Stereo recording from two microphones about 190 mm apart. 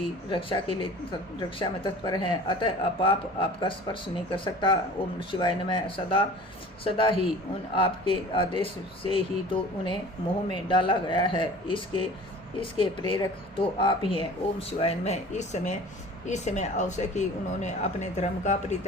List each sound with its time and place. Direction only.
0.3 s speech: 25° left (ahead or behind)